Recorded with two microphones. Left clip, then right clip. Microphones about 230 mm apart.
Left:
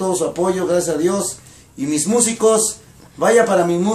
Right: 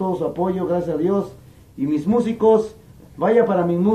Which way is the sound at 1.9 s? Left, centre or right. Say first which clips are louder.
Left 3 dB; left.